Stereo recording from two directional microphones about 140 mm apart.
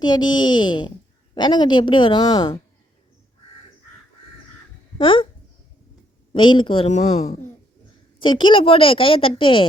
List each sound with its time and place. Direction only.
0.0 s a woman's voice: 30° left (ahead or behind)
4.9 s speech: 40° left (ahead or behind)
6.3 s a woman's voice: 35° left (ahead or behind)
6.8 s speech: 55° left (ahead or behind)
8.2 s a woman's voice: 35° left (ahead or behind)